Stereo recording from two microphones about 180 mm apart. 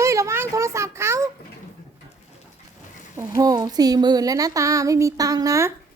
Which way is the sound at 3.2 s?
20° right (ahead or behind).